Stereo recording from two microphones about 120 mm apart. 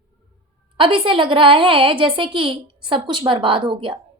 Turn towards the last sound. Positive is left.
turn(degrees=-45)  # may be behind; listen again after turning